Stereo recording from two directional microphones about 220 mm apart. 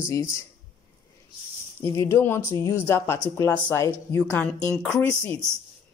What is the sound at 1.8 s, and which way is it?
Speech, 15° left (ahead or behind).